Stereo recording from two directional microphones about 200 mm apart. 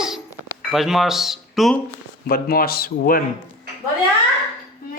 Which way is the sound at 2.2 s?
45° left (ahead or behind).